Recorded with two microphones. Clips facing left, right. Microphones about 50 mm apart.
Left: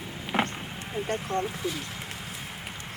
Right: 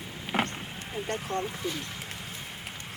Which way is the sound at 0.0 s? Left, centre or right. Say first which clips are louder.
Left 2 dB; centre.